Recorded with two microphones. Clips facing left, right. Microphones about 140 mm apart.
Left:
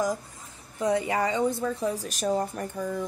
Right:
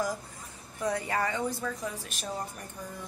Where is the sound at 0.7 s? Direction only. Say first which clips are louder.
Left 5 dB; 20° left (ahead or behind).